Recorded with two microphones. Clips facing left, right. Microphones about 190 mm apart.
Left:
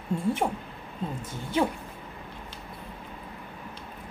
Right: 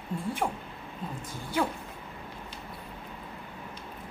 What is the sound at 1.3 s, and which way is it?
Speech, 20° left (ahead or behind).